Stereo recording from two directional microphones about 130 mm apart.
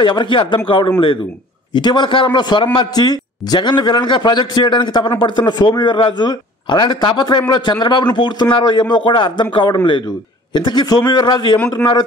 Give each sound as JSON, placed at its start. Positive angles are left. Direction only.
{"t": 0.0, "sound": "a man's voice", "side_deg": 35}